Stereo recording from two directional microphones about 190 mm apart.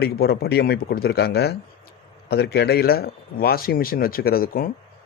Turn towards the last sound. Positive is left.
turn(degrees=50)  # may be behind; listen again after turning